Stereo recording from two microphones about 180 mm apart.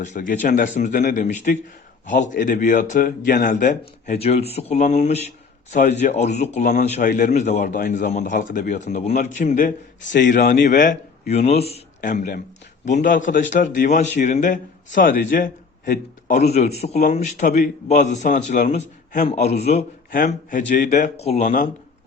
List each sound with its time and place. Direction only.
0.0 s a man's voice: 45° left (ahead or behind)
11.3 s a man's voice: 35° left (ahead or behind)